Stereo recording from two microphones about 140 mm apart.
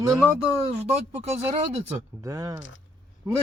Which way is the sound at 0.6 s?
50° right (ahead or behind).